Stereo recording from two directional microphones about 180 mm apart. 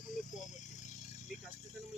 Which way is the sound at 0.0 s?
45° left (ahead or behind).